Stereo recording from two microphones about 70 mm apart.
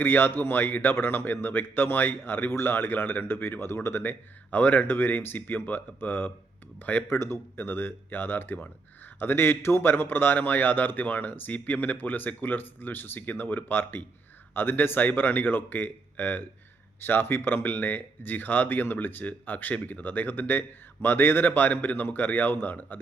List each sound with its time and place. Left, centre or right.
0.0 s a man's voice: left